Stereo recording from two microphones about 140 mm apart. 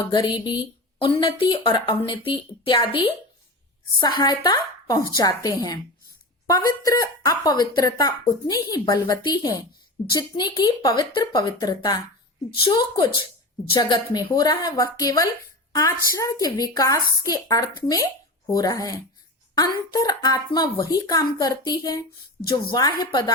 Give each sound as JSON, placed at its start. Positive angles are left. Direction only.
{"t": 0.1, "sound": "speech", "side_deg": 30}